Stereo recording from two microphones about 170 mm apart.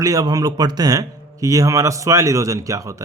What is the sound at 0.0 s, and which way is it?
A man's voice, 20° right (ahead or behind).